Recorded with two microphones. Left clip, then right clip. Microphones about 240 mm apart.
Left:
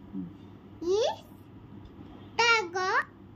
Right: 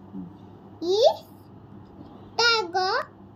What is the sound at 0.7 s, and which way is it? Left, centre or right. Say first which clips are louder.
Babbling: right 7 dB; centre.